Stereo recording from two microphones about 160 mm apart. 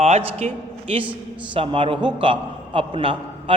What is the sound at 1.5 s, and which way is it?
A man's voice, 30° right (ahead or behind).